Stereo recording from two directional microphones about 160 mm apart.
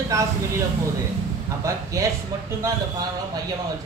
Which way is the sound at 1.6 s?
20° right (ahead or behind).